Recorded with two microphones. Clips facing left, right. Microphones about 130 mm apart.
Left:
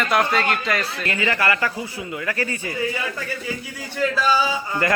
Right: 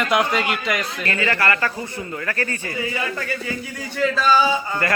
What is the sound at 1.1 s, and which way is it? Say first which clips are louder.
Speech: right 1 dB; 15° left (ahead or behind).